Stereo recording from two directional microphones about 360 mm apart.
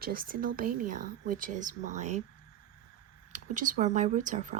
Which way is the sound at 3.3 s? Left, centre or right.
Right.